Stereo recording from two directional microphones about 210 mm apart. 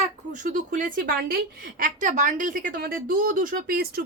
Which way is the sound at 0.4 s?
40° right (ahead or behind).